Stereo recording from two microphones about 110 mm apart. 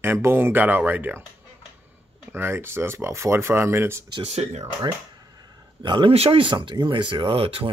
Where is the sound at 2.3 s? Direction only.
20° right (ahead or behind).